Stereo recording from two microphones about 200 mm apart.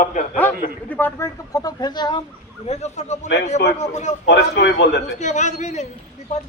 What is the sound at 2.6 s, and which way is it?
Speech, 35° left (ahead or behind).